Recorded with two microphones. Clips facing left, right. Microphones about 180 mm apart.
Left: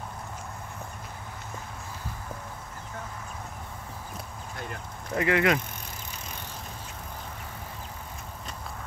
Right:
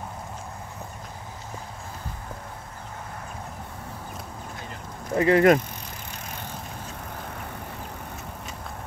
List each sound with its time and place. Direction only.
5.1 s speech: 35° right (ahead or behind)